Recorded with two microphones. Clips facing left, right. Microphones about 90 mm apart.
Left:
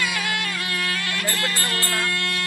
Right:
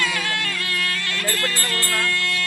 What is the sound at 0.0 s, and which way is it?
Music, 15° left (ahead or behind).